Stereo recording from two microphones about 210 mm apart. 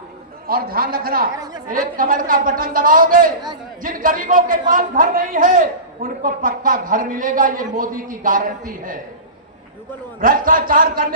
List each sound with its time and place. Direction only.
0.4 s a man's voice: 45° right (ahead or behind)
10.2 s a man's voice: 40° right (ahead or behind)